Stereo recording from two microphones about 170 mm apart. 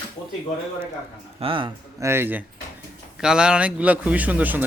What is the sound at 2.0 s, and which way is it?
Speech, 15° right (ahead or behind).